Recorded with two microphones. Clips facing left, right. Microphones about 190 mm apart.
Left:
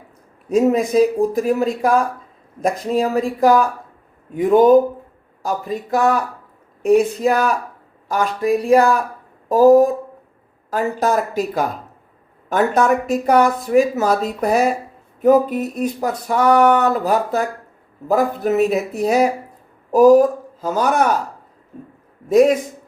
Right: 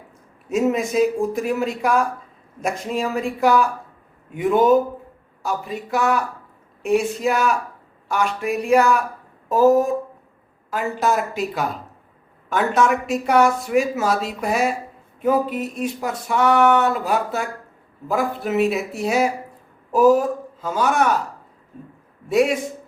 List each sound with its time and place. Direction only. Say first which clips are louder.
0.4 s speech: left 4 dB; 35° left (ahead or behind)
22.3 s speech: left 6 dB; 40° left (ahead or behind)